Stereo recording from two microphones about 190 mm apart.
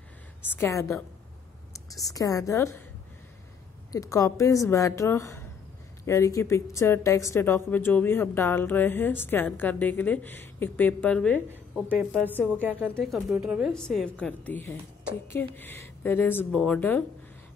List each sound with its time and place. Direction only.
0.5 s speech: 15° left (ahead or behind)
2.1 s speech: 20° left (ahead or behind)
3.9 s a woman's voice: 15° left (ahead or behind)